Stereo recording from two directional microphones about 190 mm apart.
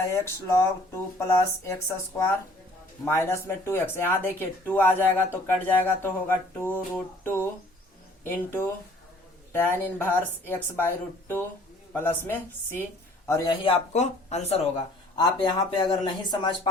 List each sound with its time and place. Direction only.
0.0 s speech: 15° left (ahead or behind)
3.0 s speech: 15° left (ahead or behind); by 14.6 s 35° left (ahead or behind)
15.2 s speech: 25° left (ahead or behind)